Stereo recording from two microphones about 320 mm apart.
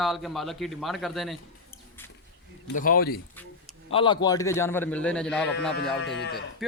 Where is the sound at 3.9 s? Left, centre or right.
Centre.